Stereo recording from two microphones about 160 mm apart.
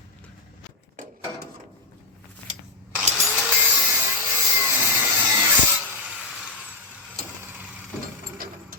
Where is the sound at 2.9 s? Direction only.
5° right (ahead or behind).